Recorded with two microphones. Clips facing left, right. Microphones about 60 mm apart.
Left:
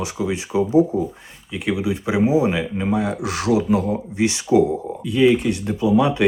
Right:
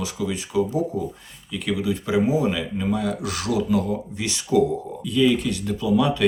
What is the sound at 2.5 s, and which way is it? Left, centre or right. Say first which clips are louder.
Speech: left 3 dB; left.